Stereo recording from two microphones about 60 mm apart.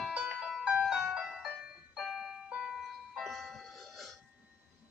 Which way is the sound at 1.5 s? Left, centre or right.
Centre.